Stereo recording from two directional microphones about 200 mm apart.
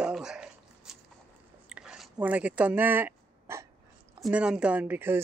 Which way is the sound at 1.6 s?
5° right (ahead or behind).